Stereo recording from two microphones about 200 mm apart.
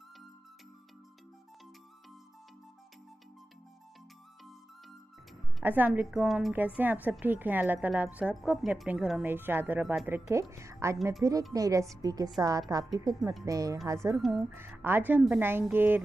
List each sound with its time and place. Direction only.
5.6 s a woman's voice: 10° right (ahead or behind)
14.1 s speech: centre (ahead or behind)
14.5 s a woman's voice: 10° right (ahead or behind)